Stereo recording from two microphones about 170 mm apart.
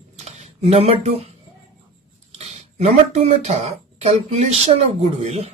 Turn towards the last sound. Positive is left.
turn(degrees=-40)  # may be behind; listen again after turning